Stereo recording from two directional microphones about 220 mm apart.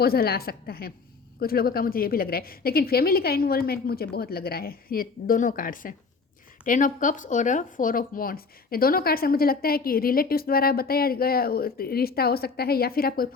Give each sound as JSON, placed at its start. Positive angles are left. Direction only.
{"t": 0.0, "sound": "speech", "side_deg": 45}